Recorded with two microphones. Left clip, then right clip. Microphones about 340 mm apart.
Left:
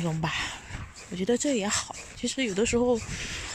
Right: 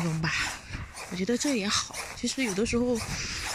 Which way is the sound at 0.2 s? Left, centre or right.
Left.